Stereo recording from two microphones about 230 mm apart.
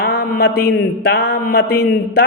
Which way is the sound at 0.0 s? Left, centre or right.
Left.